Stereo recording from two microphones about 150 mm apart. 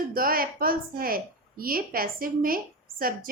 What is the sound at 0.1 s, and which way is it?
A woman's voice, 75° right (ahead or behind).